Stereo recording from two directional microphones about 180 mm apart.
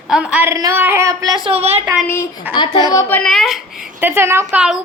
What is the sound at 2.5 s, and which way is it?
Speech, 25° left (ahead or behind).